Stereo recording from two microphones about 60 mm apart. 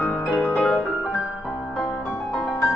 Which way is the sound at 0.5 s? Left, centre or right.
Centre.